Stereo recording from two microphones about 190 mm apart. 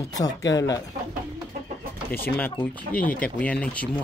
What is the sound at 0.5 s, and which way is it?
Speech, 15° left (ahead or behind).